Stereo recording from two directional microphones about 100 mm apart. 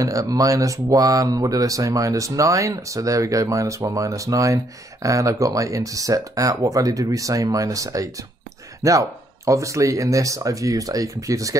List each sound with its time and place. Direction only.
0.0 s speech: 35° right (ahead or behind)